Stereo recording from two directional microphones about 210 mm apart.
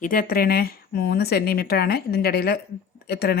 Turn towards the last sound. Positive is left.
turn(degrees=50)  # may be behind; listen again after turning